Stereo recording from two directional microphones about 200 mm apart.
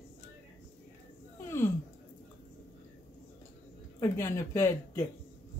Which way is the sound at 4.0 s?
15° left (ahead or behind).